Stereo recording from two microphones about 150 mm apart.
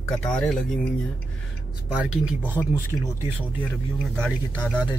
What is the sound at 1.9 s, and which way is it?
Speech, 5° right (ahead or behind).